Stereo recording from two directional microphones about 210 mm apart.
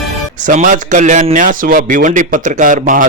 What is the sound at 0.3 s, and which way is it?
A man's voice, 40° right (ahead or behind).